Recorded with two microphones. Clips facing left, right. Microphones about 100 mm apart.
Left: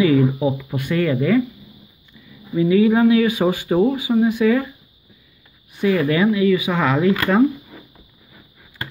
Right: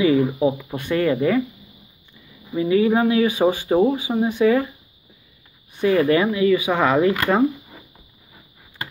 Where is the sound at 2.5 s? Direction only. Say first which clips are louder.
Left 3 dB; 30° right (ahead or behind).